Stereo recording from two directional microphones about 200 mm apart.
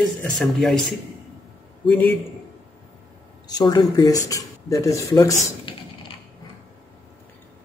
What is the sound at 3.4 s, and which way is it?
Speech, 20° left (ahead or behind).